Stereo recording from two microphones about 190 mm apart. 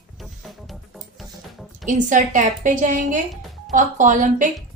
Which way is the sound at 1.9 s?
40° right (ahead or behind).